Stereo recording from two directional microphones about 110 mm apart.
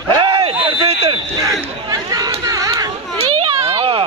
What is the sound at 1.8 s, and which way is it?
Chatter, 35° right (ahead or behind).